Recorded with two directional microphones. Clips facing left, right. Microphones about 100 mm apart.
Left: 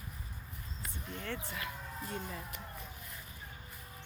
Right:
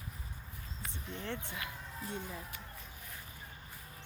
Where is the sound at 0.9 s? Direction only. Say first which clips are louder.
Even; 25° right (ahead or behind).